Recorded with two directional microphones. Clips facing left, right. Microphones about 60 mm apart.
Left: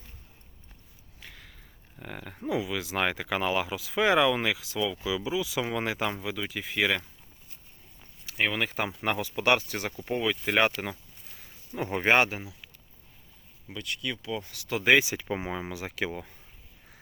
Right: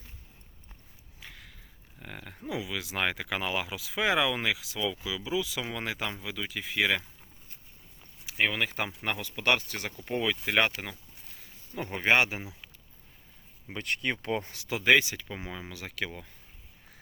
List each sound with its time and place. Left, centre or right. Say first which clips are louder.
1.2 s a sound: even; centre
2.0 s speech: left 4 dB; centre
8.4 s speech: left 1 dB; centre
13.7 s speech: right 3 dB; right
14.7 s speech: left 1 dB; centre
15.2 s speech: left 7 dB; left